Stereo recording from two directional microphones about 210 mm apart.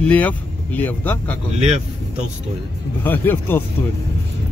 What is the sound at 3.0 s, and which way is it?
Speech, 10° left (ahead or behind).